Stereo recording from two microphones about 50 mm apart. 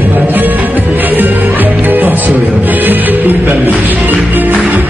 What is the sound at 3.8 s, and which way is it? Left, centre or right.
Music, right.